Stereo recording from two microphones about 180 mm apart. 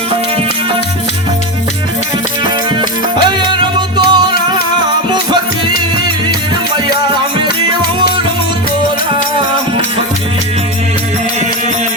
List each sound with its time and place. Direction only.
3.8 s music: 25° right (ahead or behind)